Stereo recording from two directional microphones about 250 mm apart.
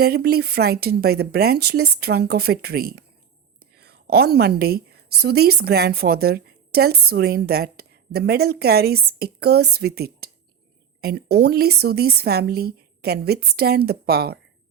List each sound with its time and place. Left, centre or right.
0.0 s a woman's voice: right